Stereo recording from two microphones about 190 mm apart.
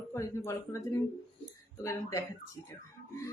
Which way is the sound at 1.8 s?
15° left (ahead or behind).